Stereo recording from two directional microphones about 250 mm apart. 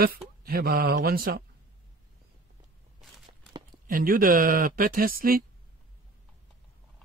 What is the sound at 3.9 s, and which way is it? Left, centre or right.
Speech, right.